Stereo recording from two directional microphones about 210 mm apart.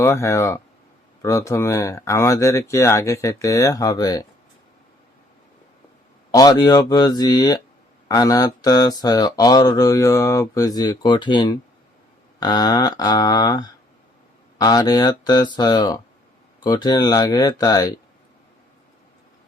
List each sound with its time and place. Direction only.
0.0 s speech: 15° left (ahead or behind)
6.3 s speech: 20° left (ahead or behind)